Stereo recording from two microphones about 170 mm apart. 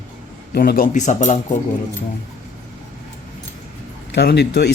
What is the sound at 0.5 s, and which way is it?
Speech, 65° left (ahead or behind).